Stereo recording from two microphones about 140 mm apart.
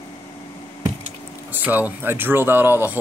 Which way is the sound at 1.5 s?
10° right (ahead or behind).